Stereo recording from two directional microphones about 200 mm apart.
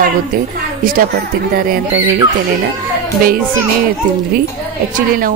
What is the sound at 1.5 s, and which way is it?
Speech, 45° right (ahead or behind).